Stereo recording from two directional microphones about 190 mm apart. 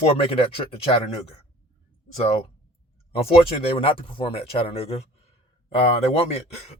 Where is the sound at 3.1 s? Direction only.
30° left (ahead or behind).